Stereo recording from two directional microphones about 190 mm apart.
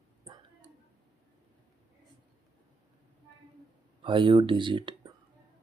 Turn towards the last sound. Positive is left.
turn(degrees=-25)  # may be behind; listen again after turning